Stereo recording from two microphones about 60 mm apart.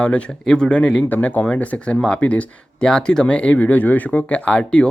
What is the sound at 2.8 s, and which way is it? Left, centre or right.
Speech, centre.